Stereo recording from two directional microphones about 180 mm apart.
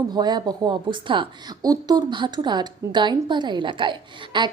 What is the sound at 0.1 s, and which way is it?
Speech, 25° right (ahead or behind).